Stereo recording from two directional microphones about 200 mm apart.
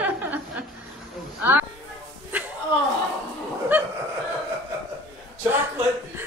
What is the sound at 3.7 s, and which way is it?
Chuckle, 10° right (ahead or behind).